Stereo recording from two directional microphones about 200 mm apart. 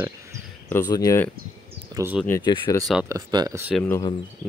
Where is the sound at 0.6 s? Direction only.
10° left (ahead or behind).